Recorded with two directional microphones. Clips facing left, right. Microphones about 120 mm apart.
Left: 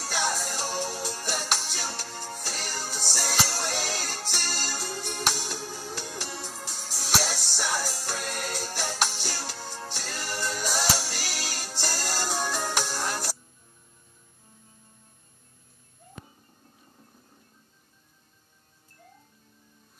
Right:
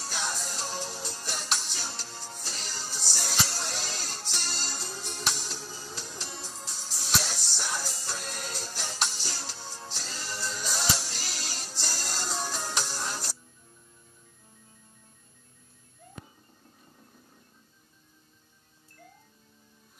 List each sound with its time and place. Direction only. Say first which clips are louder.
0.0 s music: left 6 dB; 80° left